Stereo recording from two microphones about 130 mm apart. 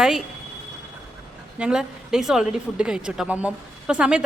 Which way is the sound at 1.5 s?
5° right (ahead or behind).